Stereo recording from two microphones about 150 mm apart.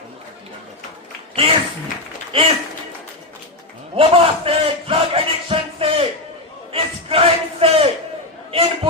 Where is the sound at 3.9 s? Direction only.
40° right (ahead or behind).